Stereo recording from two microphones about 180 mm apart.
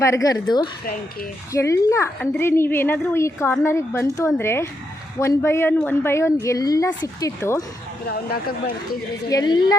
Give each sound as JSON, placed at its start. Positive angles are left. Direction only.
{"t": 0.0, "sound": "a woman's voice", "side_deg": 15}
{"t": 8.1, "sound": "speech", "side_deg": 60}
{"t": 9.3, "sound": "a woman's voice", "side_deg": 20}